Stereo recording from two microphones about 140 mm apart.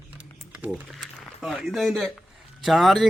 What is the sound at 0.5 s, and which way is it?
A man's voice, 10° right (ahead or behind).